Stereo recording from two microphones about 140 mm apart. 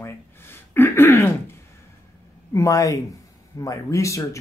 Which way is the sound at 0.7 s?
15° left (ahead or behind).